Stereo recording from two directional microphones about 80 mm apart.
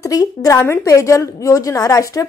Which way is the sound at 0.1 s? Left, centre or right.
Left.